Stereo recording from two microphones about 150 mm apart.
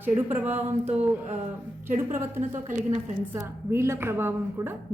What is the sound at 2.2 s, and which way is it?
A woman's voice, 15° right (ahead or behind).